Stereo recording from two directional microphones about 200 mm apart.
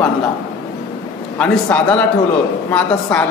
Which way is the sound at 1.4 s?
5° left (ahead or behind).